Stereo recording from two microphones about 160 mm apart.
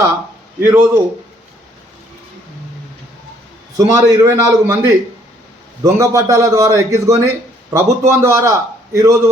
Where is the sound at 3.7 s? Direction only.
20° right (ahead or behind).